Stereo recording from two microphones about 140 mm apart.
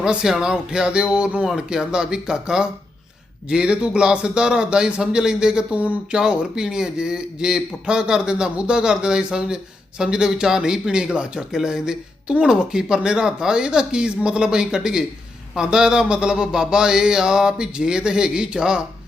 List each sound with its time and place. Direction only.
0.0 s speech: 5° right (ahead or behind)